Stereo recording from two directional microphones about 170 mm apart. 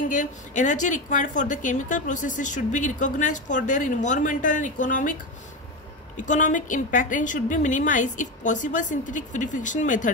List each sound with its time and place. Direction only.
0.1 s a woman's voice: 50° left (ahead or behind)
6.2 s a woman's voice: 50° left (ahead or behind)